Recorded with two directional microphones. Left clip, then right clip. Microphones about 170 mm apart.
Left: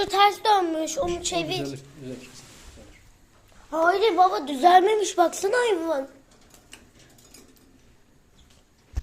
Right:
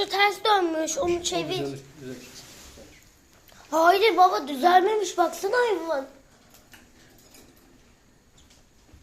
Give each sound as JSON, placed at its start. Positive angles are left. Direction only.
{"t": 0.0, "sound": "a woman's voice", "side_deg": 15}
{"t": 3.7, "sound": "speech", "side_deg": -10}
{"t": 3.9, "sound": "a woman's voice", "side_deg": 5}